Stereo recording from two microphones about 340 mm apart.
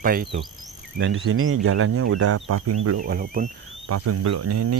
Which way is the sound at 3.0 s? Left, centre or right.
Right.